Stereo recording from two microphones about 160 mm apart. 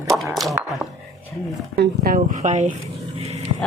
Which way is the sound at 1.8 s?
60° right (ahead or behind).